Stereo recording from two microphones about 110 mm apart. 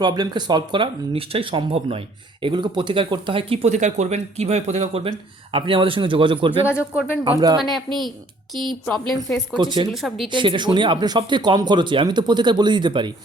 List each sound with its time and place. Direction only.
0.0 s speech: 40° right (ahead or behind); by 5.1 s 70° right (ahead or behind)
5.5 s speech: 55° right (ahead or behind)
7.3 s speech: 35° right (ahead or behind)
8.5 s a woman's voice: 5° left (ahead or behind)
9.6 s speech: 45° right (ahead or behind)
9.9 s a woman's voice: centre (ahead or behind)
10.2 s speech: 45° right (ahead or behind)